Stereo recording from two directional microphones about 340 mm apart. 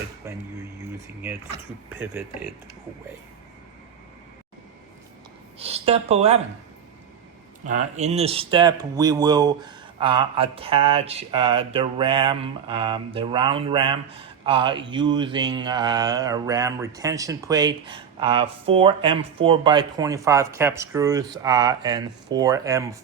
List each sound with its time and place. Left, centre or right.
0.2 s speech: centre
5.5 s speech: centre
7.6 s speech: right